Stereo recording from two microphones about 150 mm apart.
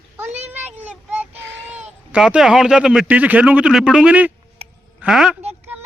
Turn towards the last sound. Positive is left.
turn(degrees=-5)  # may be behind; listen again after turning